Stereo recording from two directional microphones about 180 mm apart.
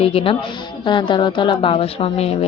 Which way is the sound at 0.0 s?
30° left (ahead or behind).